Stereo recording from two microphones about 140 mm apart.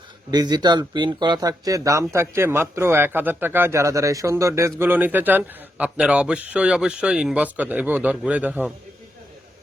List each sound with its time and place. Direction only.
0.3 s speech: 30° right (ahead or behind); by 8.7 s 10° right (ahead or behind)